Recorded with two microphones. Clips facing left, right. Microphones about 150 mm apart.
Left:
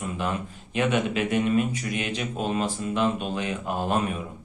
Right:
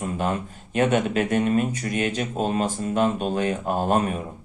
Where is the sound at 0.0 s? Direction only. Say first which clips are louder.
Right 3 dB; 45° right (ahead or behind).